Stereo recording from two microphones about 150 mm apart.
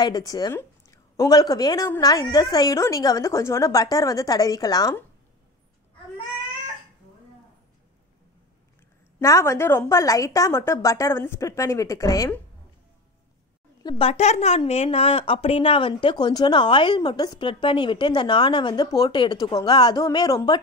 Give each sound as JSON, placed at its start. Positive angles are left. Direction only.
{"t": 0.0, "sound": "a woman's voice", "side_deg": 25}
{"t": 9.2, "sound": "a woman's voice", "side_deg": 20}
{"t": 13.8, "sound": "a child's voice", "side_deg": 40}